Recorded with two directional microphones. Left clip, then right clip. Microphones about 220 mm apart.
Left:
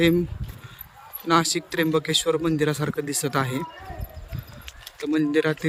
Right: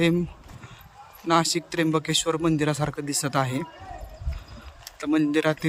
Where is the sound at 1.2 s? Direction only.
Centre (ahead or behind).